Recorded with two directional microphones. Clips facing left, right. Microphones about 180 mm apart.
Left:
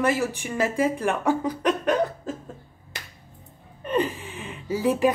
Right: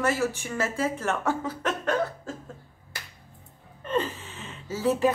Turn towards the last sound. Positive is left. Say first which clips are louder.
# left 2 dB
turn(degrees=15)  # may be behind; listen again after turning